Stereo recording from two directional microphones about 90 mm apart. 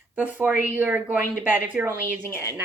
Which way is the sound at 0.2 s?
20° right (ahead or behind).